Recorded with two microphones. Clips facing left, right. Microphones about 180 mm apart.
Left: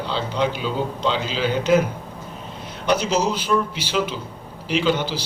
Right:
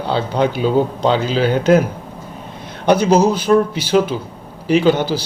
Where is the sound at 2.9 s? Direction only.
55° right (ahead or behind).